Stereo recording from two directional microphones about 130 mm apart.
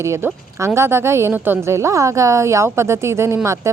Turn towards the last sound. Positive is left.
turn(degrees=-25)  # may be behind; listen again after turning